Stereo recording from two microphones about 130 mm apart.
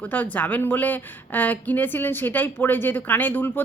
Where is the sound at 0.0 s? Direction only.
10° left (ahead or behind).